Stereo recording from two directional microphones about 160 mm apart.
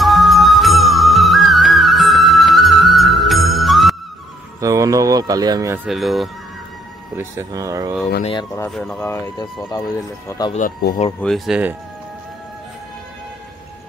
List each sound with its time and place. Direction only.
0.0 s music: centre (ahead or behind)
4.6 s speech: 20° right (ahead or behind)
5.9 s speech: centre (ahead or behind)
7.2 s speech: 20° right (ahead or behind)
8.2 s speech: 30° left (ahead or behind)
8.7 s speech: 5° left (ahead or behind)
9.0 s speech: 15° left (ahead or behind)
11.1 s speech: centre (ahead or behind)